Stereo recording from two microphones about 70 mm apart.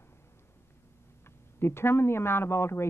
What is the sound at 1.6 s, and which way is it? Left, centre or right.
Speech, left.